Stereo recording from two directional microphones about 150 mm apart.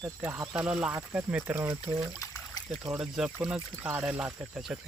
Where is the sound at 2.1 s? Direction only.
25° left (ahead or behind).